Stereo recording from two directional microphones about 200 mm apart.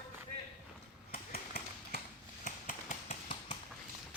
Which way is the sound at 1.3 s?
50° left (ahead or behind).